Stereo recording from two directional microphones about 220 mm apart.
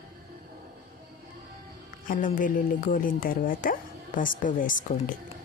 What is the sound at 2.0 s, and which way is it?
Speech, 35° left (ahead or behind).